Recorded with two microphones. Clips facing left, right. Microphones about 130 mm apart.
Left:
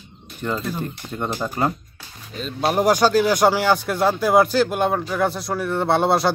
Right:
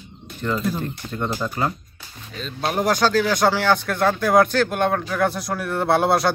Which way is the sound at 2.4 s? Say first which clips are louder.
Left 3 dB; 5° left (ahead or behind).